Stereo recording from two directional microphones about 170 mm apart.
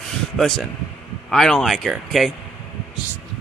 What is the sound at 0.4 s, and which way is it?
A man's voice, centre (ahead or behind).